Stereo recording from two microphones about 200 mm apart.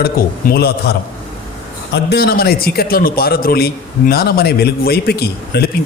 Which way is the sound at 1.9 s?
55° left (ahead or behind).